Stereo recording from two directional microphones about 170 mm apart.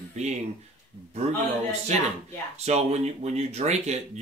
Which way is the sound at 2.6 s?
40° right (ahead or behind).